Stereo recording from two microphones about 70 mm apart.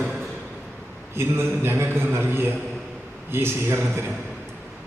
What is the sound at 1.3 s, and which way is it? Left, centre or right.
A man's voice, right.